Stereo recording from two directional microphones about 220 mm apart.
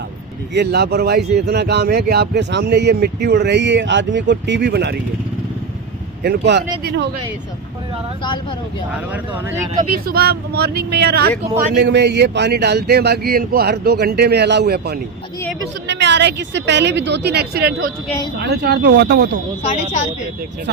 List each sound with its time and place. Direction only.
0.5 s speech: 50° right (ahead or behind)
6.2 s speech: 50° right (ahead or behind)
8.2 s speech: 20° left (ahead or behind)
9.1 s speech: 10° right (ahead or behind)
9.9 s speech: 40° right (ahead or behind)
15.4 s speech: 10° left (ahead or behind)
15.9 s speech: 55° right (ahead or behind)